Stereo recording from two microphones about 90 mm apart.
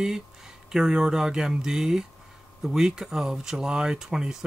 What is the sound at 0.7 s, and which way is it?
Speech, 5° right (ahead or behind).